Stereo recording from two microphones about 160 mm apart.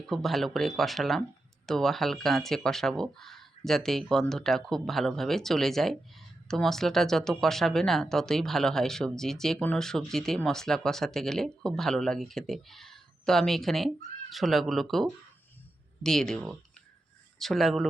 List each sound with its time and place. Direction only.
0.1 s speech: centre (ahead or behind)